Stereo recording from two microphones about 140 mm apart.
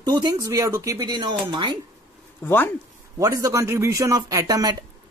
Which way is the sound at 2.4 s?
15° left (ahead or behind).